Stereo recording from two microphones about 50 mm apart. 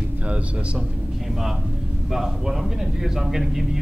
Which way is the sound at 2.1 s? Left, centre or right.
Centre.